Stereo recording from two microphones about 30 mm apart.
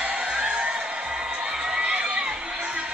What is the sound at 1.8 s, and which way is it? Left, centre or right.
Crowd, right.